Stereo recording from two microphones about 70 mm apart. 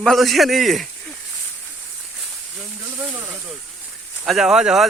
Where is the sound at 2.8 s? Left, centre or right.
Right.